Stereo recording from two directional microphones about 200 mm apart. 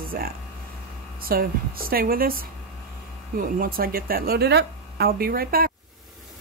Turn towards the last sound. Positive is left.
turn(degrees=-45)  # may be behind; listen again after turning